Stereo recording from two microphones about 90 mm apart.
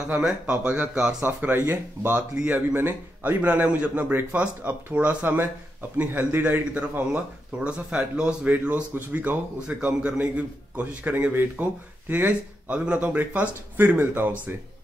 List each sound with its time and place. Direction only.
0.5 s speech: 15° right (ahead or behind)
1.2 s speech: 25° right (ahead or behind)